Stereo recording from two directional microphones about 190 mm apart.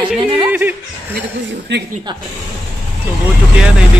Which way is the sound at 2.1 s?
25° right (ahead or behind).